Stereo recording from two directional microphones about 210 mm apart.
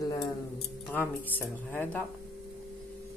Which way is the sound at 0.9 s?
10° left (ahead or behind).